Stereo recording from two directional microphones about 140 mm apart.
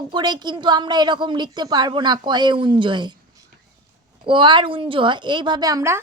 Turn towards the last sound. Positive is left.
turn(degrees=-20)  # may be behind; listen again after turning